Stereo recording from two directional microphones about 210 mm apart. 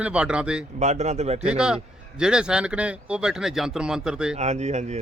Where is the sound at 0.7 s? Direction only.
35° right (ahead or behind).